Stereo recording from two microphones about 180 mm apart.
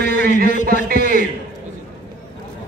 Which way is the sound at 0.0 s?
55° right (ahead or behind).